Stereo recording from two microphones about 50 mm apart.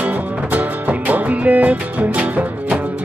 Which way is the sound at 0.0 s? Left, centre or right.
Right.